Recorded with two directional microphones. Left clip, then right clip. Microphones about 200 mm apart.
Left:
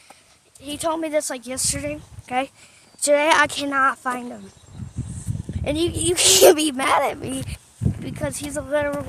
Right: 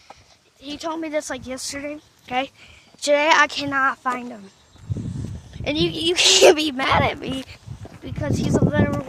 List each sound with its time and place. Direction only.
0.6 s speech: centre (ahead or behind)
1.2 s speech: 10° right (ahead or behind)
1.5 s speech: centre (ahead or behind)
5.6 s speech: 10° right (ahead or behind)
6.1 s speech: centre (ahead or behind)
8.7 s speech: centre (ahead or behind)